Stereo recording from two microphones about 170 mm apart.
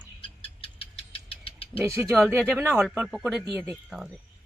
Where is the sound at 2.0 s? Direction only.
Centre (ahead or behind).